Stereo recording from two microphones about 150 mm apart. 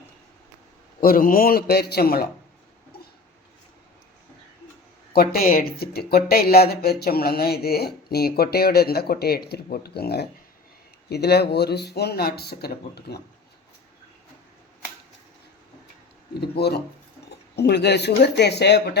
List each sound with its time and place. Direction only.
1.0 s a man's voice: 75° left (ahead or behind); by 2.2 s 90° left
5.1 s speech: 85° left
16.3 s speech: 90° left